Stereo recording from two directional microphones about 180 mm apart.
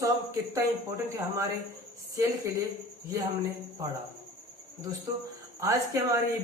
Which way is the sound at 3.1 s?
20° right (ahead or behind).